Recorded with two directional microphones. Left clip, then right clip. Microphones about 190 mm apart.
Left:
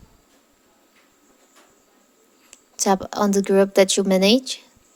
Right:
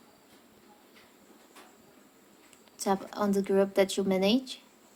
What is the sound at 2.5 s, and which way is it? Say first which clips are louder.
A woman's voice: left 10 dB; 45° left (ahead or behind).